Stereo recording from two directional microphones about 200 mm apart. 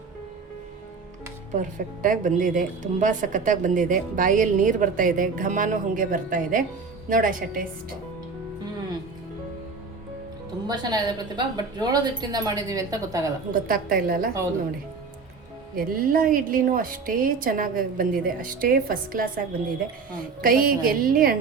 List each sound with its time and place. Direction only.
1.5 s a woman's voice: 40° right (ahead or behind)
10.7 s a woman's voice: 20° right (ahead or behind)
13.5 s speech: 45° right (ahead or behind)
15.7 s speech: 45° right (ahead or behind)
20.4 s speech: 45° right (ahead or behind)